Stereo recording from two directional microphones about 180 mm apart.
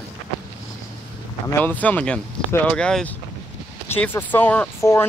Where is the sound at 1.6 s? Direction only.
10° left (ahead or behind).